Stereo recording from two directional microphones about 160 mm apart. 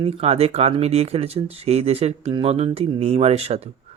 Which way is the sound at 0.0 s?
40° right (ahead or behind).